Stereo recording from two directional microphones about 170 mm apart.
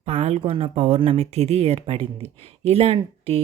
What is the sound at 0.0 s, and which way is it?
Speech, 35° right (ahead or behind).